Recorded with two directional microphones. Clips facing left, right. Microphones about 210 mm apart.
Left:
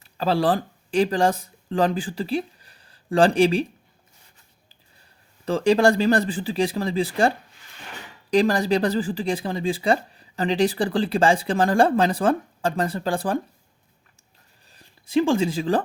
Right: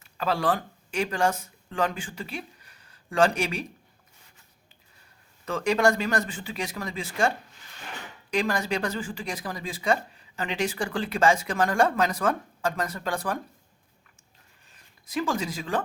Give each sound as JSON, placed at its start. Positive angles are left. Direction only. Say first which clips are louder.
{"t": 0.0, "sound": "speech", "louder": "left 5 dB", "side_deg": 30}
{"t": 5.5, "sound": "speech", "louder": "left 5 dB", "side_deg": 30}
{"t": 14.7, "sound": "a woman's voice", "louder": "left 11 dB", "side_deg": 30}